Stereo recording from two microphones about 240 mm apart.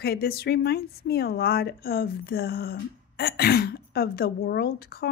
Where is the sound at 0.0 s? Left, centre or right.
Left.